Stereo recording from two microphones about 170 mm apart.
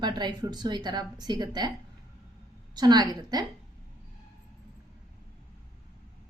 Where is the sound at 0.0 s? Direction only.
25° right (ahead or behind).